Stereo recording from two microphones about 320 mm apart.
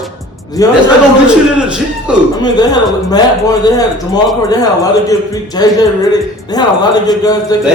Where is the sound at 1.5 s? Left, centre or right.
Centre.